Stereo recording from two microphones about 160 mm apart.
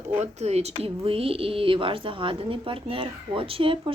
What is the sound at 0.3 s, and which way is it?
A woman's voice, 40° right (ahead or behind).